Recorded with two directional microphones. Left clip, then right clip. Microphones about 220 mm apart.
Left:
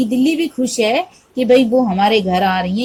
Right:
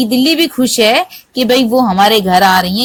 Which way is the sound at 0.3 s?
20° right (ahead or behind).